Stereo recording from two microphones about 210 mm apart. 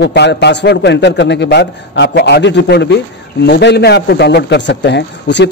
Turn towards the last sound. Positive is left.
turn(degrees=55)  # may be behind; listen again after turning